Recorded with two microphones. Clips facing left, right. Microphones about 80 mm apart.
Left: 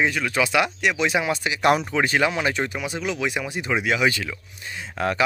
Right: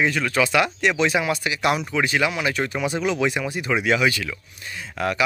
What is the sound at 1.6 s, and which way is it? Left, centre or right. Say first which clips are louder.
Speech: left 3 dB; left.